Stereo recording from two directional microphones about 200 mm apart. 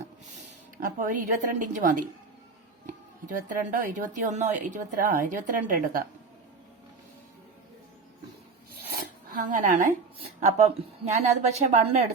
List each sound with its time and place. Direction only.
0.8 s a woman's voice: 40° right (ahead or behind)
3.5 s a woman's voice: 40° right (ahead or behind)
8.9 s a sound: 45° right (ahead or behind)
10.4 s a woman's voice: 35° right (ahead or behind)